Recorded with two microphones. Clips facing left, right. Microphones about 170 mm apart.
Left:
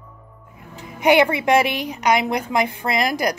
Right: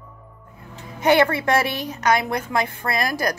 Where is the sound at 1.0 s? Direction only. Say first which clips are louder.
Left 1 dB; 15° left (ahead or behind).